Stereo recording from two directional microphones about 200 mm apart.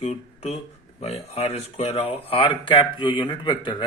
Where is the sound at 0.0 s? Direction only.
30° left (ahead or behind).